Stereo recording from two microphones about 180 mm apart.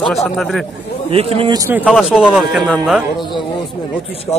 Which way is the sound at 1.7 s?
5° right (ahead or behind).